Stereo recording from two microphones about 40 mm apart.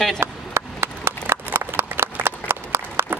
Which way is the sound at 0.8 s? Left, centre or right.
Right.